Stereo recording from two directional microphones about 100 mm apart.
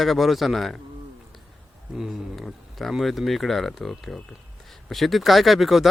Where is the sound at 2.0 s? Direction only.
Centre (ahead or behind).